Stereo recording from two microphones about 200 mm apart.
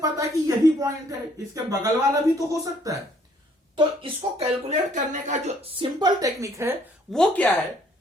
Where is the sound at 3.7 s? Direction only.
30° right (ahead or behind).